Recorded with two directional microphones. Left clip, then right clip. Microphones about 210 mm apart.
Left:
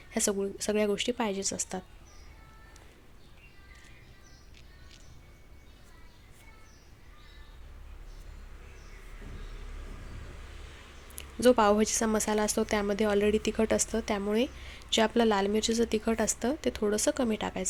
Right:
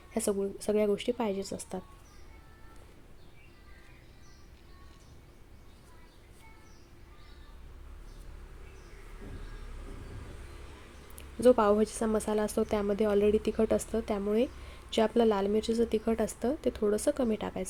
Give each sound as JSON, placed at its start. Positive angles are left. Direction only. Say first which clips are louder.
{"t": 0.1, "sound": "a woman's voice", "louder": "left 1 dB", "side_deg": 5}
{"t": 11.3, "sound": "a woman's voice", "louder": "left 1 dB", "side_deg": 5}